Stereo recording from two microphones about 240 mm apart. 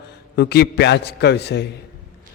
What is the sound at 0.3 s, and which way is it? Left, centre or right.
A man's voice, left.